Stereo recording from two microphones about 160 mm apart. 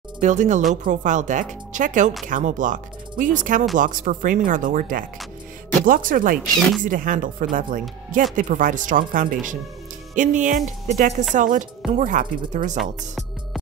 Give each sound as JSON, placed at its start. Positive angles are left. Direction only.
{"t": 0.2, "sound": "speech", "side_deg": -50}